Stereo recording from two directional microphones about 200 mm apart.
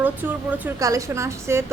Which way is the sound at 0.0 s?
10° right (ahead or behind).